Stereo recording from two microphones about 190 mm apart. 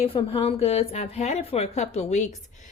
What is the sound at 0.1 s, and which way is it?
A woman's voice, 30° left (ahead or behind).